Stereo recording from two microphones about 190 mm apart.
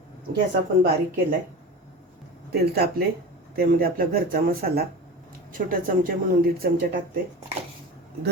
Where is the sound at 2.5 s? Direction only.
55° right (ahead or behind).